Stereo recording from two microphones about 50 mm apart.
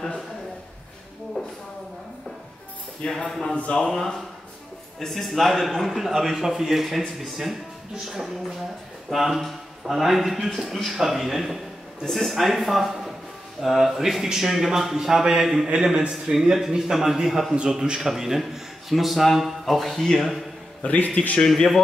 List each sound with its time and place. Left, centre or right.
1.4 s a sound: centre
3.2 s a man's voice: centre
20.8 s a man's voice: left
21.4 s speech: centre